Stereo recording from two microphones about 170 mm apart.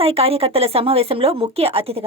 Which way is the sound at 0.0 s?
35° right (ahead or behind).